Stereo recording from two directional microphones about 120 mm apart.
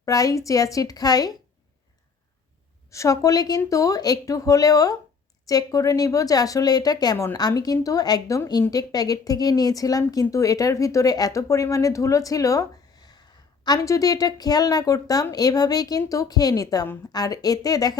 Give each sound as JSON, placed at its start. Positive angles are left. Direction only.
{"t": 0.0, "sound": "speech", "side_deg": 30}
{"t": 2.9, "sound": "speech", "side_deg": 25}